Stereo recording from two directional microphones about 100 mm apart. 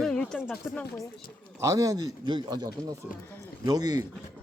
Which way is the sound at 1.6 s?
35° right (ahead or behind).